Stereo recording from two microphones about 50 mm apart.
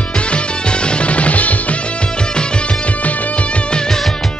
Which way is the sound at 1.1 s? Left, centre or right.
Left.